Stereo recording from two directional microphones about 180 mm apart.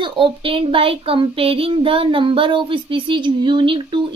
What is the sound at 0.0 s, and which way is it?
Child singing, 30° right (ahead or behind).